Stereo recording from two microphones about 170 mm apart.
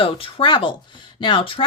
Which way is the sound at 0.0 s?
30° left (ahead or behind).